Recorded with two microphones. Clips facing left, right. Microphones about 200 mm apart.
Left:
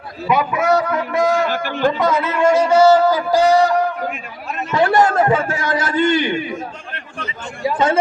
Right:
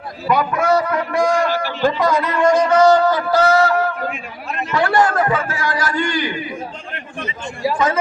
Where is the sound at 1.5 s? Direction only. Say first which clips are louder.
Even; 50° left (ahead or behind).